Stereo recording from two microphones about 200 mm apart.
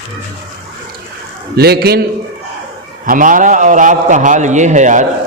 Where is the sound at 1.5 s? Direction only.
50° right (ahead or behind).